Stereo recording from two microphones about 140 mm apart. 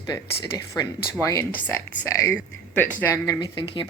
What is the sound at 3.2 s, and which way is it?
Speech, 30° left (ahead or behind).